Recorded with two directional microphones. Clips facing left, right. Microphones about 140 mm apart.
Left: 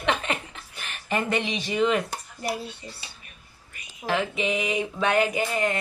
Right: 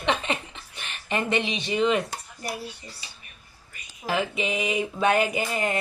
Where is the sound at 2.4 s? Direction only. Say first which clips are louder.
Left 4 dB; 25° left (ahead or behind).